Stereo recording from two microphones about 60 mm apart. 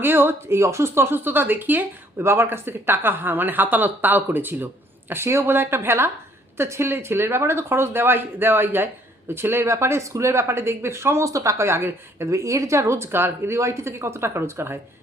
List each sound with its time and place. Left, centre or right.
0.0 s speech: right
2.1 s a woman's voice: right
11.3 s a woman's voice: right